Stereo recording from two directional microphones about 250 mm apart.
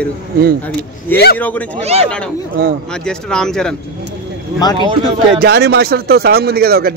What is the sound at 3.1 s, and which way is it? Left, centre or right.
Speech, centre.